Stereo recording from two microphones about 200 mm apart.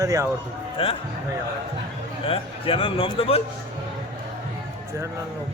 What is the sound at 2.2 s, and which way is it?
A man's voice, 30° left (ahead or behind).